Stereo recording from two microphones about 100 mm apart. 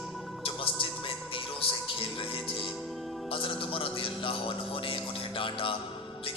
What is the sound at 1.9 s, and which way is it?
Music, 60° left (ahead or behind).